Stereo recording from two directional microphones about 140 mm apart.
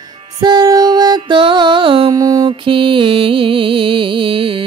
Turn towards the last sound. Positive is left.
turn(degrees=-40)  # may be behind; listen again after turning